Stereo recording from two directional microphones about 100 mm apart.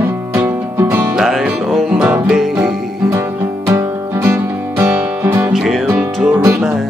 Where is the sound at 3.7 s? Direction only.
25° right (ahead or behind).